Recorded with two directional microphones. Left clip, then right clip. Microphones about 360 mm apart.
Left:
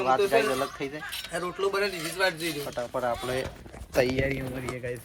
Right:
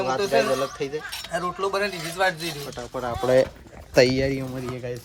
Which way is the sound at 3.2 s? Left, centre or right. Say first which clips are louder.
Right 12 dB; centre.